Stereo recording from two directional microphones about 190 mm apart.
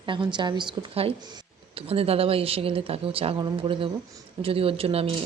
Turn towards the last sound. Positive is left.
turn(degrees=-30)  # may be behind; listen again after turning